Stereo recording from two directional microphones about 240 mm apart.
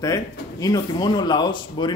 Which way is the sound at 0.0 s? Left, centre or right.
Centre.